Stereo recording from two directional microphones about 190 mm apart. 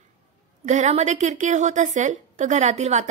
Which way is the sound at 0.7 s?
35° right (ahead or behind).